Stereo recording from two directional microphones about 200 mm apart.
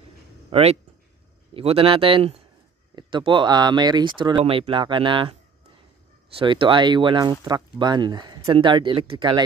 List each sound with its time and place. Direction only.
0.5 s speech: 30° right (ahead or behind)
6.3 s speech: 25° right (ahead or behind)